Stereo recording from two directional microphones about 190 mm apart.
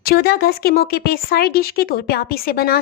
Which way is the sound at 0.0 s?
55° left (ahead or behind).